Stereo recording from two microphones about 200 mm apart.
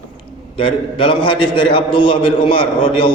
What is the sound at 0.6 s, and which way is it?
A man's voice, 25° left (ahead or behind).